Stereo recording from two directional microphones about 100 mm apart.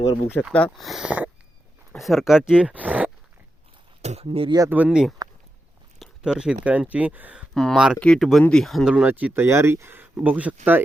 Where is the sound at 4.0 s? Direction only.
90° right.